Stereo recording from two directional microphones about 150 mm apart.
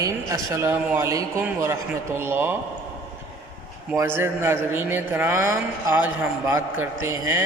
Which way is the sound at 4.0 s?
15° right (ahead or behind).